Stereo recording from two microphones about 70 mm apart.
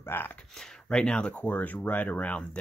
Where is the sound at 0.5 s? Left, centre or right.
Centre.